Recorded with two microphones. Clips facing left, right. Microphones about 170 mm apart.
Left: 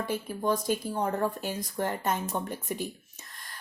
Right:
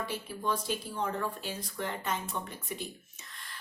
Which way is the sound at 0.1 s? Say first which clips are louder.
Left 5 dB; 45° left (ahead or behind).